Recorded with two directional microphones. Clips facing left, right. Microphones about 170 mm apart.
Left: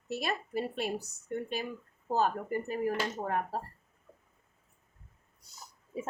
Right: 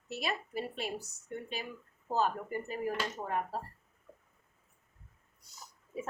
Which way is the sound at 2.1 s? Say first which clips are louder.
Left 2 dB; 45° left (ahead or behind).